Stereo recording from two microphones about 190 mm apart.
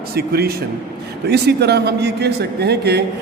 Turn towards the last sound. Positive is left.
turn(degrees=-60)  # may be behind; listen again after turning